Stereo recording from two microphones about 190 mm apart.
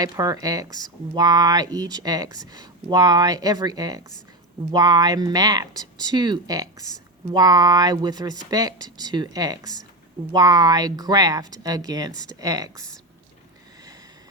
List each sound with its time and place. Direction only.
0.0 s speech: 20° right (ahead or behind)